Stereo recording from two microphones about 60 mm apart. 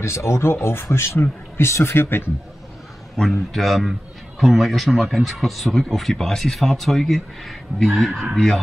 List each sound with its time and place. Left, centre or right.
0.0 s speech: left
3.3 s speech: centre